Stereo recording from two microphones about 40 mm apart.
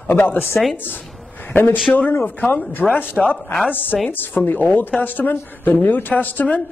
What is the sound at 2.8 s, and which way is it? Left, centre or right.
Speech, centre.